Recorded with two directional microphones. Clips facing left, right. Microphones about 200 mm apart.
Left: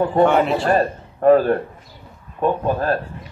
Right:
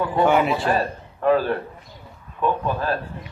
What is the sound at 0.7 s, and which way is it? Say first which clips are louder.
A man's voice: left 4 dB; 45° left (ahead or behind).